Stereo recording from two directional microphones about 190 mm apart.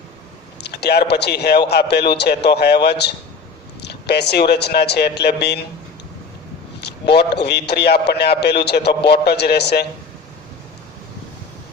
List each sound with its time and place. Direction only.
0.6 s a man's voice: 60° left (ahead or behind)
6.8 s a man's voice: 60° left (ahead or behind)